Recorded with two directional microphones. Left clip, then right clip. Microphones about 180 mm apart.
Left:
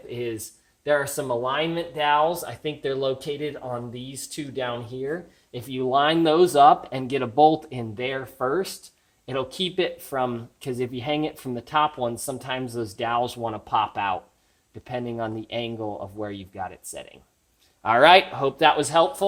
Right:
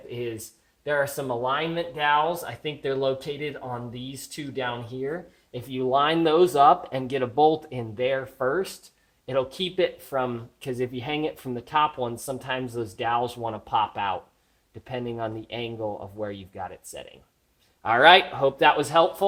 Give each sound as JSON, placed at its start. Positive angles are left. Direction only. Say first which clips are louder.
{"t": 0.9, "sound": "speech", "louder": "left 2 dB", "side_deg": 40}
{"t": 18.3, "sound": "speech", "louder": "even", "side_deg": 25}